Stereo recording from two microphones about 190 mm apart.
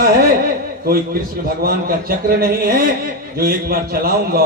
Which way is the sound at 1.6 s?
50° right (ahead or behind).